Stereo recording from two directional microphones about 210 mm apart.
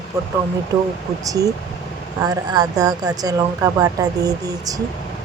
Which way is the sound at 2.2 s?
20° right (ahead or behind).